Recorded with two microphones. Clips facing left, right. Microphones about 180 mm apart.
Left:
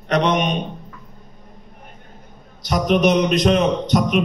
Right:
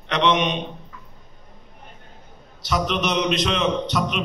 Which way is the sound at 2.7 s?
50° left (ahead or behind).